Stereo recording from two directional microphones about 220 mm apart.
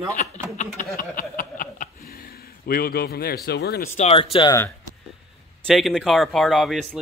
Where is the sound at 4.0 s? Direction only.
30° left (ahead or behind).